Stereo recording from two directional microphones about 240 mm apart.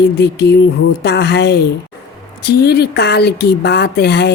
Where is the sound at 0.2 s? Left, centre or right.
Left.